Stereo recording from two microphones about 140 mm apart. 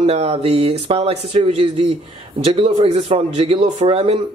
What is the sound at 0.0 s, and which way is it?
Speech, 45° right (ahead or behind).